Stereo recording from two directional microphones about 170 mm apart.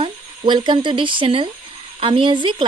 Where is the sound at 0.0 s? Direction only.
25° right (ahead or behind).